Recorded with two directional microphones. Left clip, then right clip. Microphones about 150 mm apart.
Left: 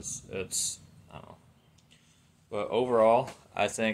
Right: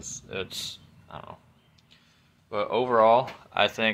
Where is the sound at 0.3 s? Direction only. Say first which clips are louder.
Right 2 dB; 5° right (ahead or behind).